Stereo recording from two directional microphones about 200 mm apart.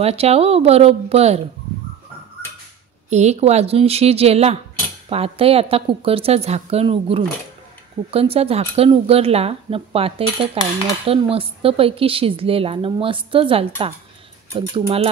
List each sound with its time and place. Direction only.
0.0 s a woman's voice: 30° right (ahead or behind)
3.1 s a woman's voice: 35° right (ahead or behind)